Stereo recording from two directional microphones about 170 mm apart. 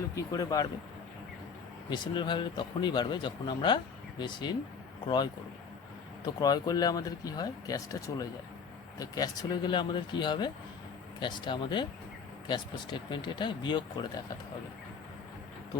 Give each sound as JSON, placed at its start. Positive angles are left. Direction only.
{"t": 0.3, "sound": "speech", "side_deg": 20}
{"t": 1.9, "sound": "speech", "side_deg": 25}